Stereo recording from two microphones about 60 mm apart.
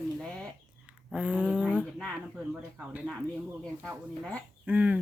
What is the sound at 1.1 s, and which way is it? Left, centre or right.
Speech, right.